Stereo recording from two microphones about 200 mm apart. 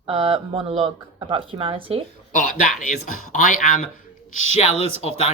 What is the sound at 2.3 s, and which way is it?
Speech, 40° left (ahead or behind).